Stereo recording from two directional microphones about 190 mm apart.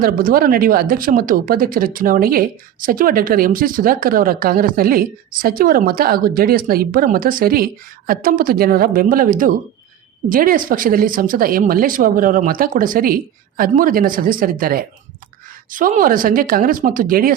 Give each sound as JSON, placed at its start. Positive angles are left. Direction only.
{"t": 0.0, "sound": "speech", "side_deg": -50}